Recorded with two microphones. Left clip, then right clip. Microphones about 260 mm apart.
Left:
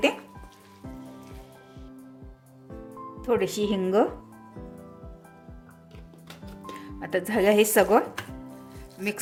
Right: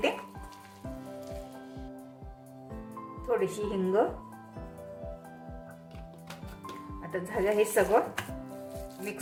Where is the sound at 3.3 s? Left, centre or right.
Left.